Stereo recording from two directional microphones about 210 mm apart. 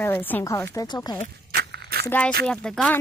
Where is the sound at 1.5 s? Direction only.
50° right (ahead or behind).